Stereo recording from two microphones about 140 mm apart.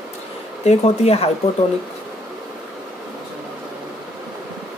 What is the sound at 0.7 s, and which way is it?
Speech, 50° left (ahead or behind).